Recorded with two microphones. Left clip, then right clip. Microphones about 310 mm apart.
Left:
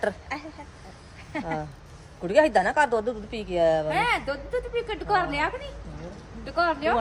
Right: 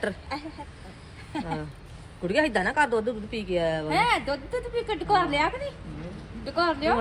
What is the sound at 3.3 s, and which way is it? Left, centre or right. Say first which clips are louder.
Speech: right 2 dB; left.